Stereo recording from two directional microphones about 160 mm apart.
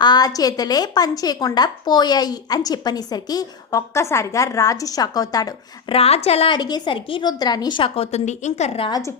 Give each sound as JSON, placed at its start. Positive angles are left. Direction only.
{"t": 0.0, "sound": "a woman's voice", "side_deg": 25}
{"t": 5.9, "sound": "a woman's voice", "side_deg": 40}
{"t": 6.6, "sound": "a woman's voice", "side_deg": 25}